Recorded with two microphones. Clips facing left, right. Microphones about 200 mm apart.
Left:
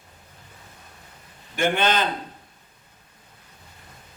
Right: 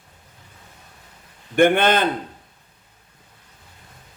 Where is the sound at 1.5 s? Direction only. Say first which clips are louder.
Right 6 dB; 55° right (ahead or behind).